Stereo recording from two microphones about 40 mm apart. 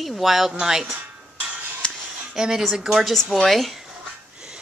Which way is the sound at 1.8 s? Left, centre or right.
Left.